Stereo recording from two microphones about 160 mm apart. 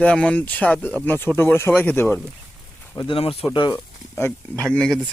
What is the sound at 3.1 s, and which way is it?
Speech, 35° left (ahead or behind).